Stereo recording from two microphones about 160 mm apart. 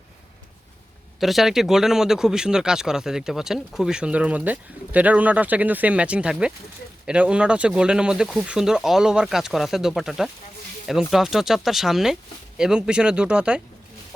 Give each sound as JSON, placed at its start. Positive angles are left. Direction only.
{"t": 1.2, "sound": "speech", "side_deg": 0}